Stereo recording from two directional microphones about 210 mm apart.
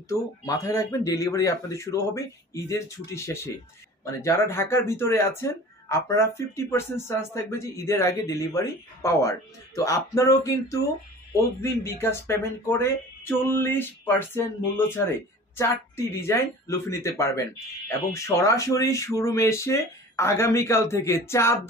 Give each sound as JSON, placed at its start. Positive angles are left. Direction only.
{"t": 0.1, "sound": "speech", "side_deg": 15}